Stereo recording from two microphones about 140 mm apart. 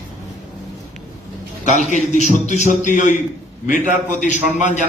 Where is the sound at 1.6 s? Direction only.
60° left (ahead or behind).